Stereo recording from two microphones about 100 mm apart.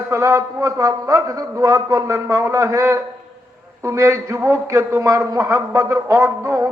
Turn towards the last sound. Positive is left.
turn(degrees=-30)  # may be behind; listen again after turning